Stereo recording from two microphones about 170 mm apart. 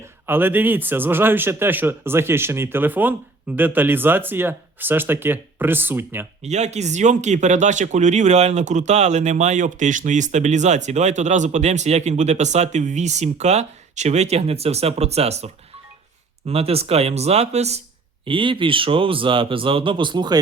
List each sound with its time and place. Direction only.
0.3 s speech: 10° right (ahead or behind)
6.4 s speech: 40° right (ahead or behind)
16.5 s speech: 35° right (ahead or behind)